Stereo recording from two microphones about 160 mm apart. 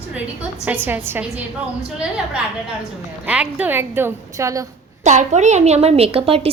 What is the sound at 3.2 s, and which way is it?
A woman's voice, 10° right (ahead or behind).